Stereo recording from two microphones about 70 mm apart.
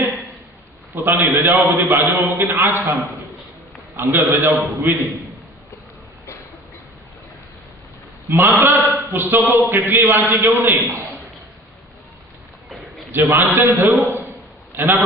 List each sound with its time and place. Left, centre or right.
1.0 s a man's voice: right
3.9 s a man's voice: right
8.3 s a man's voice: right
13.1 s a man's voice: right